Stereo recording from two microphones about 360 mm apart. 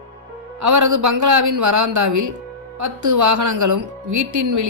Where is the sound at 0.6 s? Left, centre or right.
Right.